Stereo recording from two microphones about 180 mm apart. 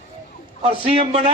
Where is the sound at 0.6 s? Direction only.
35° right (ahead or behind).